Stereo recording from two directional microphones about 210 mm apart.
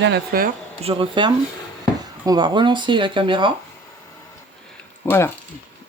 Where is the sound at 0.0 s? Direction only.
50° right (ahead or behind).